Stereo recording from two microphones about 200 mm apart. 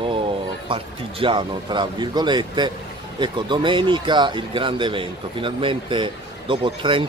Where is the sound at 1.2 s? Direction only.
25° right (ahead or behind).